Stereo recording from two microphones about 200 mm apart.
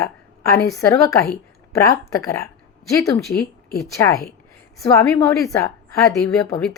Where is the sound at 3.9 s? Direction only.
15° left (ahead or behind).